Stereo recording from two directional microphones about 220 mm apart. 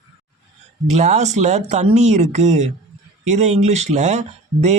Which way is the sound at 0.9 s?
30° right (ahead or behind).